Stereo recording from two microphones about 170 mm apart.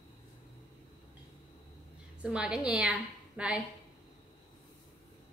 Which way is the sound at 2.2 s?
5° right (ahead or behind).